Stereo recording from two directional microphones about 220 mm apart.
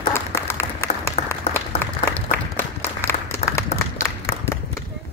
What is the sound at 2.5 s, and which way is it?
Applause, 10° left (ahead or behind).